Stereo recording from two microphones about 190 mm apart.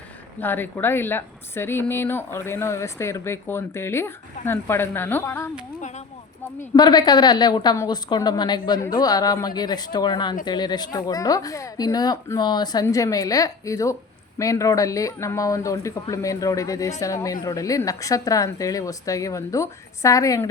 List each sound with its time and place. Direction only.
0.3 s a woman's voice: 10° left (ahead or behind)
6.6 s a woman's voice: 20° left (ahead or behind)